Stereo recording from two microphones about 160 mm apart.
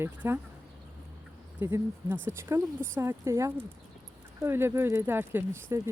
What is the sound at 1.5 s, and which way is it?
Speech, 15° right (ahead or behind).